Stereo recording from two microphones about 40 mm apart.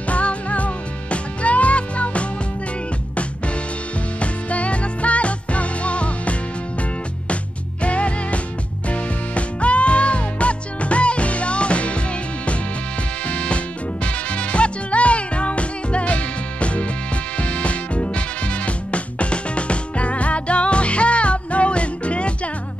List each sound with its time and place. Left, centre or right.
0.1 s music: left
4.2 s music: left
7.8 s music: left
13.3 s music: left